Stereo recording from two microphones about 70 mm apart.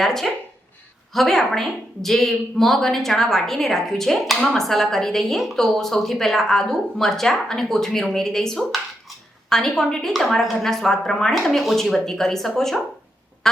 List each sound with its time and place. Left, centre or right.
0.0 s a woman's voice: centre